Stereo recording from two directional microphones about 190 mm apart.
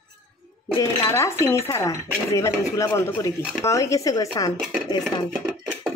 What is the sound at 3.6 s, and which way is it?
Speech, 15° left (ahead or behind).